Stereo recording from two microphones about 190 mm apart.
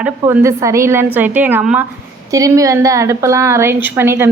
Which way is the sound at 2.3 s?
15° right (ahead or behind).